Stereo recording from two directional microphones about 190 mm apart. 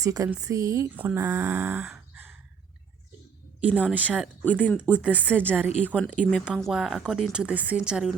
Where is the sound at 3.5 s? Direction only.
10° right (ahead or behind).